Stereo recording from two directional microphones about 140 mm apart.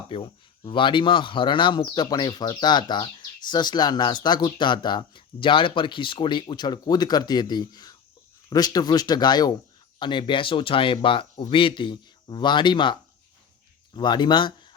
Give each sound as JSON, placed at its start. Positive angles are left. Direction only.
{"t": 0.1, "sound": "speech", "side_deg": 40}